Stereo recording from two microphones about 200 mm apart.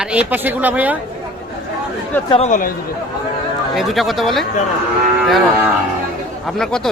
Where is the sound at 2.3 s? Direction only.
35° left (ahead or behind).